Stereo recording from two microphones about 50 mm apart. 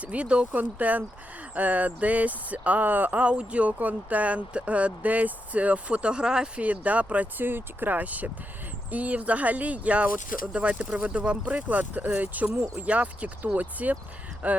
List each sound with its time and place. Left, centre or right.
0.0 s speech: right
0.6 s speech: right; by 6.5 s centre
6.6 s speech: right
7.3 s speech: right